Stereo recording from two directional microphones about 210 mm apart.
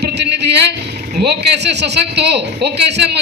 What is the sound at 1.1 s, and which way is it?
Speech, 55° right (ahead or behind).